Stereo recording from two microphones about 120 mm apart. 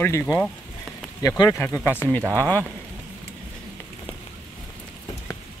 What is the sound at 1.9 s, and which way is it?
Speech, 15° left (ahead or behind).